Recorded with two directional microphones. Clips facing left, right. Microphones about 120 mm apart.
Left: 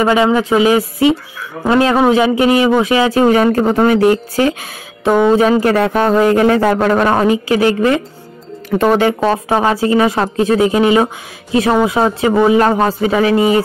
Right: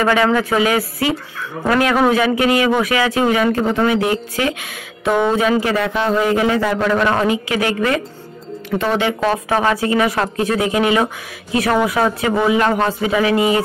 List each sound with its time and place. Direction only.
0.0 s speech: 20° left (ahead or behind)
5.7 s a man's voice: 45° left (ahead or behind)
8.6 s a man's voice: 45° left (ahead or behind)
9.2 s speech: 25° left (ahead or behind)